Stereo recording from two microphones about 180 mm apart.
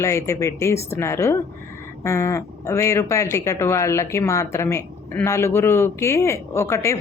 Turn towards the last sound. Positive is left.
turn(degrees=15)  # may be behind; listen again after turning